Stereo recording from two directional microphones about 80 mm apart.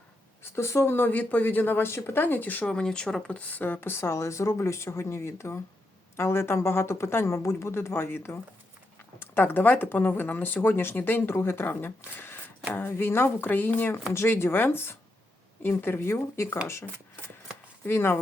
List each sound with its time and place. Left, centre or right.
0.4 s speech: left
2.6 s speech: centre; by 16.6 s left
17.8 s speech: left